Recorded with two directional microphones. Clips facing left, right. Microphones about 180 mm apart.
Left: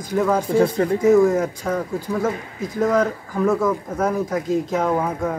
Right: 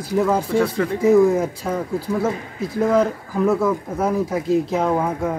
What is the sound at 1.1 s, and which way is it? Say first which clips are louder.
Speech: right 1 dB; 5° right (ahead or behind).